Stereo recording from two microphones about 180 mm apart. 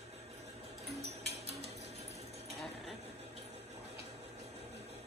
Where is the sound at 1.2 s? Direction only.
65° right (ahead or behind).